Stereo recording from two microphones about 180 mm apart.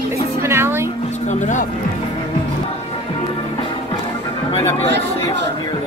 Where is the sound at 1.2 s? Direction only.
40° left (ahead or behind).